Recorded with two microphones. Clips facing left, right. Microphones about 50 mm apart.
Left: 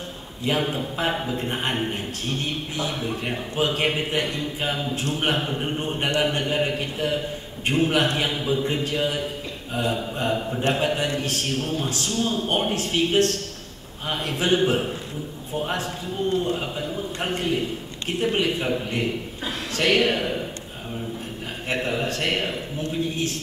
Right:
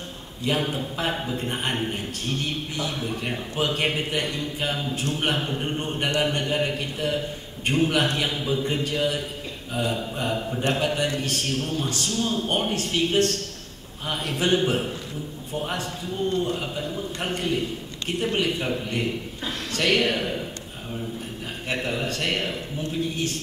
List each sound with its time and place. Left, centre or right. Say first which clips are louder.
0.5 s a man's voice: left 1 dB; centre
14.3 s a man's voice: left 1 dB; centre
21.6 s a sound: left 2 dB; centre